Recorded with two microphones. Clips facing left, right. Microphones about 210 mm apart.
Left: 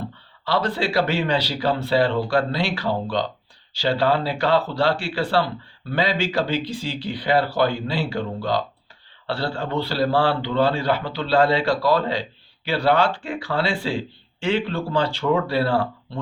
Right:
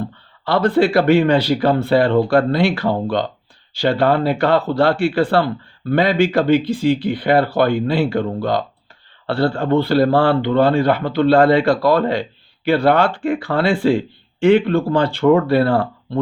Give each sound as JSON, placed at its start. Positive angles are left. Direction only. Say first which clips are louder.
{"t": 0.4, "sound": "speech", "louder": "right 8 dB", "side_deg": -55}